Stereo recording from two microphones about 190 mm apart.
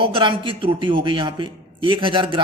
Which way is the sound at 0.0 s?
25° right (ahead or behind).